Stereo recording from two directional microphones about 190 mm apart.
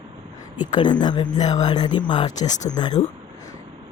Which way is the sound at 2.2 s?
40° left (ahead or behind).